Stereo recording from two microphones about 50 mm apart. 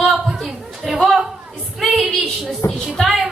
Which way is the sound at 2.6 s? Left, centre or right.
Left.